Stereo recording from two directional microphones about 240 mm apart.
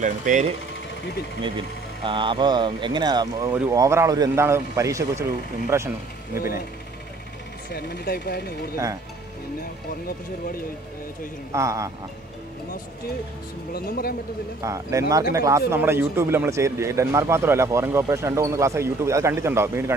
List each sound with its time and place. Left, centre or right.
0.0 s speech: right
2.0 s a man's voice: right
7.7 s speech: left
10.0 s speech: left
11.5 s a man's voice: centre
13.7 s speech: left
14.6 s a man's voice: centre